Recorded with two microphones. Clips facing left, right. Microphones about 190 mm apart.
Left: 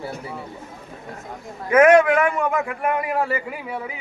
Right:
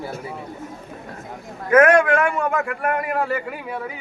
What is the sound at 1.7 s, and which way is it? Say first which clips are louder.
A man's voice: left 1 dB; 10° left (ahead or behind).